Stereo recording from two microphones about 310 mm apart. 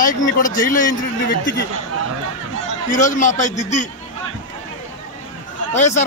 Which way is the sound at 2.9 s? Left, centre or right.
Left.